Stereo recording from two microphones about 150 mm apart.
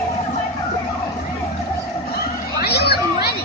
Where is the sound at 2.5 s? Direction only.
90° left.